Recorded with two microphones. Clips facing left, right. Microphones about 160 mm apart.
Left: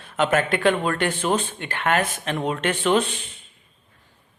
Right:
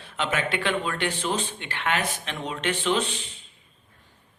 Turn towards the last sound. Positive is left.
turn(degrees=55)  # may be behind; listen again after turning